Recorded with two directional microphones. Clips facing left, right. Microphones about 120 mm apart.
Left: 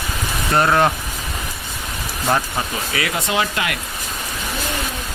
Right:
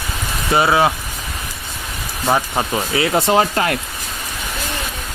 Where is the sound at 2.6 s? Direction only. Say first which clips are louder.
Right 5 dB; 30° right (ahead or behind).